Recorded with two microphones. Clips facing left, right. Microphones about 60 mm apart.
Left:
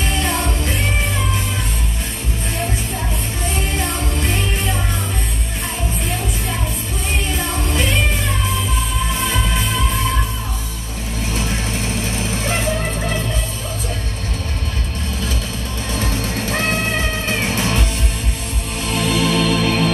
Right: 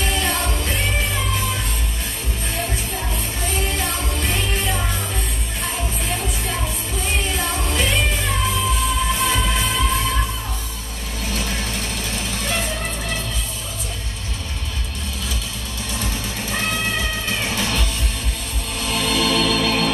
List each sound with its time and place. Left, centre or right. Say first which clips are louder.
0.0 s music: left 2 dB; centre
3.7 s music: left 2 dB; centre
7.3 s music: left 1 dB; centre
9.2 s music: even; centre
15.9 s music: left 5 dB; left
17.3 s music: left 4 dB; left
18.9 s music: left 2 dB; centre